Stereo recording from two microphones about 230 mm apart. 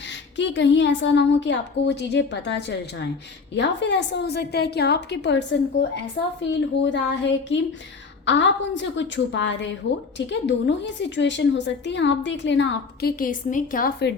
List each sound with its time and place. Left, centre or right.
0.3 s a woman's voice: left